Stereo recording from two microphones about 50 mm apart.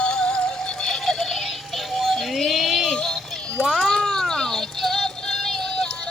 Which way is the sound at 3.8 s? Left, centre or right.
Centre.